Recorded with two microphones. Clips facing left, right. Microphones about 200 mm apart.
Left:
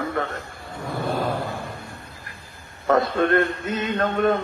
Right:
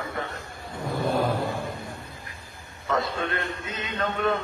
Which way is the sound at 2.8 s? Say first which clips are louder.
Left 8 dB; 55° left (ahead or behind).